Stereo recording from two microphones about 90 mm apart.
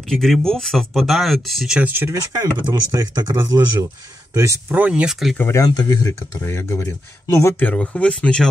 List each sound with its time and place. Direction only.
0.1 s speech: 5° left (ahead or behind)
1.8 s speech: 25° right (ahead or behind)
2.3 s speech: 45° right (ahead or behind)
4.6 s speech: 20° right (ahead or behind)
5.0 s speech: 5° right (ahead or behind)
5.7 s speech: 50° left (ahead or behind)
6.4 s speech: 30° left (ahead or behind)
7.5 s speech: 15° left (ahead or behind)